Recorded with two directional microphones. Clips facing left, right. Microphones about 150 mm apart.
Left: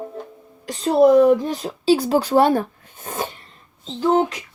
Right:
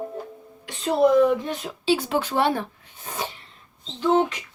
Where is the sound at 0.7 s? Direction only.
40° left (ahead or behind).